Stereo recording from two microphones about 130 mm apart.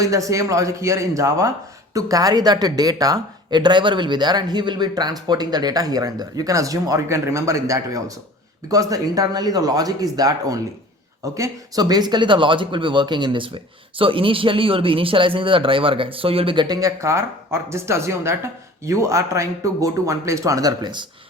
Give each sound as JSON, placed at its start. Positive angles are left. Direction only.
{"t": 0.0, "sound": "speech", "side_deg": -25}